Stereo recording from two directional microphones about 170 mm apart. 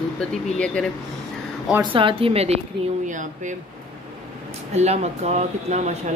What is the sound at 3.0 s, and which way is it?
Speech, 50° right (ahead or behind).